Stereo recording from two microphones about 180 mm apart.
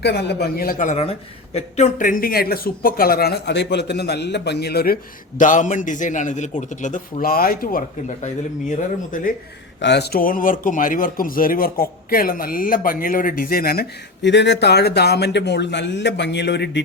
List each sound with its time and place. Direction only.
0.0 s a man's voice: 65° left (ahead or behind)
5.4 s a man's voice: 45° left (ahead or behind)
9.8 s a man's voice: 70° left (ahead or behind)